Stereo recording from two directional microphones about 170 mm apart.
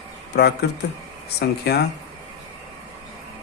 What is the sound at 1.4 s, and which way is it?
Speech, 70° left (ahead or behind).